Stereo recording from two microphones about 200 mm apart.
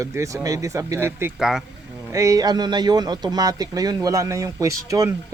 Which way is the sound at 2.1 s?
15° right (ahead or behind).